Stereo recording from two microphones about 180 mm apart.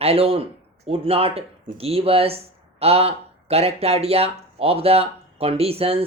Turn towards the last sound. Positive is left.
turn(degrees=-35)  # may be behind; listen again after turning